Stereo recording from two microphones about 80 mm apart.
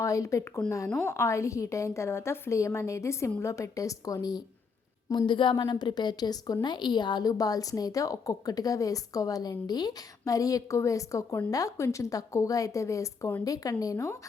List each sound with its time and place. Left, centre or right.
0.0 s a woman's voice: left
5.1 s a woman's voice: left